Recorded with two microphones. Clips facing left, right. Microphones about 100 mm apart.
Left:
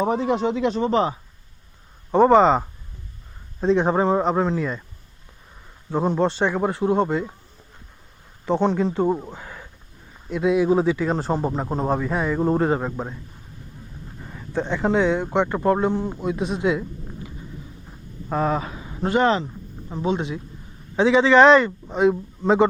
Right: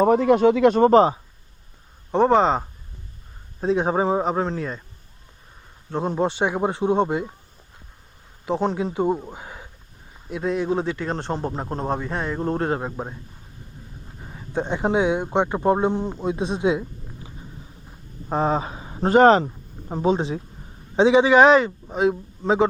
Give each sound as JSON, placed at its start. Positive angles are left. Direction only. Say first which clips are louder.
{"t": 0.0, "sound": "speech", "louder": "right 5 dB", "side_deg": -55}
{"t": 2.1, "sound": "a man's voice", "louder": "left 3 dB", "side_deg": 0}
{"t": 5.9, "sound": "a man's voice", "louder": "left 3 dB", "side_deg": 0}
{"t": 6.1, "sound": "a man's voice", "louder": "right 2 dB", "side_deg": -15}
{"t": 8.4, "sound": "a man's voice", "louder": "left 3 dB", "side_deg": -5}
{"t": 9.3, "sound": "a sound", "louder": "even", "side_deg": -15}
{"t": 10.2, "sound": "a man's voice", "louder": "left 5 dB", "side_deg": 0}
{"t": 12.8, "sound": "a man's voice", "louder": "left 2 dB", "side_deg": -10}
{"t": 14.2, "sound": "a man's voice", "louder": "even", "side_deg": -15}
{"t": 18.3, "sound": "speech", "louder": "right 1 dB", "side_deg": -25}
{"t": 20.9, "sound": "a man's voice", "louder": "right 1 dB", "side_deg": -20}